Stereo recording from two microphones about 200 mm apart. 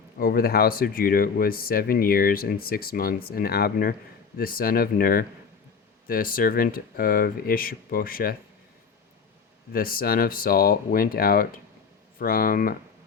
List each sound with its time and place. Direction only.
0.2 s speech: 45° left (ahead or behind)
9.7 s speech: 45° left (ahead or behind)